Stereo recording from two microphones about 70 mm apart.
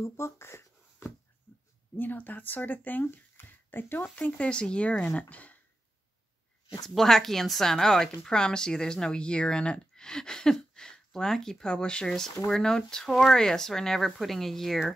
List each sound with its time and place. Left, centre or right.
0.0 s speech: left
2.0 s speech: left
6.9 s speech: centre